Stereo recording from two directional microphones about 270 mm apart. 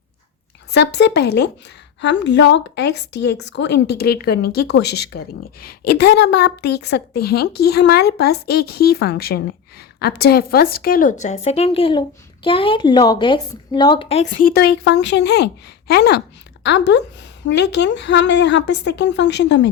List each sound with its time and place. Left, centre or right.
0.7 s a woman's voice: left